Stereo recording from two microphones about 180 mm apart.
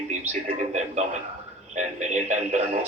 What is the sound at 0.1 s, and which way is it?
Speech, 40° right (ahead or behind).